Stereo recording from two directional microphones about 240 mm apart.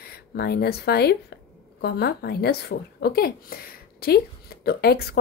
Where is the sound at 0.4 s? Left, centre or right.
Left.